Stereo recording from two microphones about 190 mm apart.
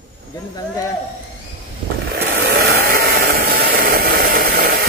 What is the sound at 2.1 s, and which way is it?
Chainsaw, 55° right (ahead or behind).